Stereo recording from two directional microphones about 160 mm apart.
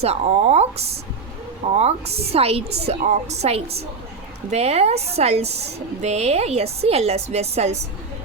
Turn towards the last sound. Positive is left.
turn(degrees=-45)  # may be behind; listen again after turning